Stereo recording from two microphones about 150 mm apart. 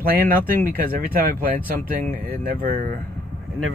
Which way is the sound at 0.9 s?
75° right (ahead or behind).